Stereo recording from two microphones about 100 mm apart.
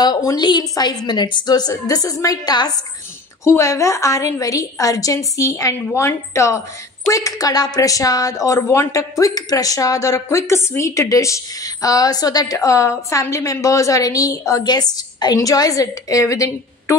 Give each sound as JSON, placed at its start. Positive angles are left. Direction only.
{"t": 0.0, "sound": "a woman's voice", "side_deg": 40}
{"t": 3.4, "sound": "a woman's voice", "side_deg": 30}